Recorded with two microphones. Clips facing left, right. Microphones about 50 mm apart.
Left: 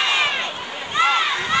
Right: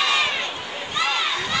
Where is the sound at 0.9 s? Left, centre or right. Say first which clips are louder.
Left 5 dB; left.